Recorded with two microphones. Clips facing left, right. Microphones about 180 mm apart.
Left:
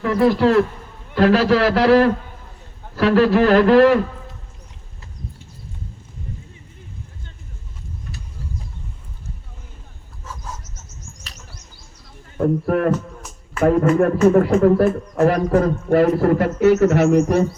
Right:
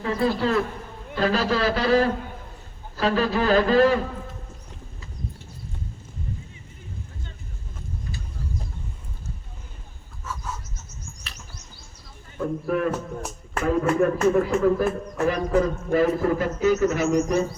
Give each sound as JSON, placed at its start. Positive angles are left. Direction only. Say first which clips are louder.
{"t": 0.0, "sound": "a man's voice", "louder": "left 7 dB", "side_deg": 75}
{"t": 12.4, "sound": "a man's voice", "louder": "left 6 dB", "side_deg": 55}